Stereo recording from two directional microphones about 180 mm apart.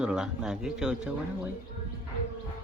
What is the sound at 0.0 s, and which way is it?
Speech, 5° right (ahead or behind).